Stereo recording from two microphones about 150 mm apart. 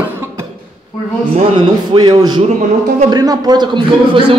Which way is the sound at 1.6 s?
30° right (ahead or behind).